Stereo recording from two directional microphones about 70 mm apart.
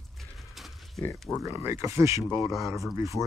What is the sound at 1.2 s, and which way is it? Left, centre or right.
Speech, centre.